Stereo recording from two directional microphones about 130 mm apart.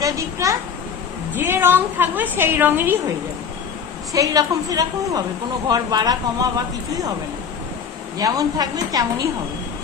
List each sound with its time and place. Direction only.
0.0 s a woman's voice: 25° right (ahead or behind)
4.1 s a woman's voice: 25° right (ahead or behind)
8.2 s a woman's voice: 30° right (ahead or behind)